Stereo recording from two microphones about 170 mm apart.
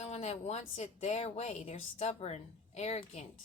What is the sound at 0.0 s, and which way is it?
A woman's voice, 40° left (ahead or behind).